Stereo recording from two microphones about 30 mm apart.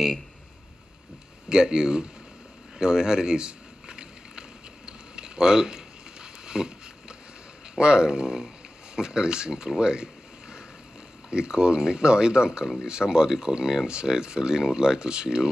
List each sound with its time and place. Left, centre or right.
1.5 s speech: right
2.8 s a sound: right
7.7 s speech: right
11.2 s speech: right